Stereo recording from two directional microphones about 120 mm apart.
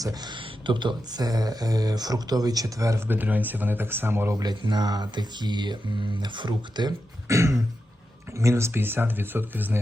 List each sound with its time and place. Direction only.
0.0 s speech: 35° right (ahead or behind)
3.2 s speech: 15° right (ahead or behind); by 6.9 s 40° right (ahead or behind)
7.3 s throat clearing: 25° right (ahead or behind)
8.4 s speech: 25° right (ahead or behind)